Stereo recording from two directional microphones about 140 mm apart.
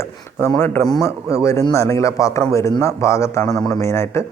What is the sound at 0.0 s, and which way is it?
Speech, 20° left (ahead or behind).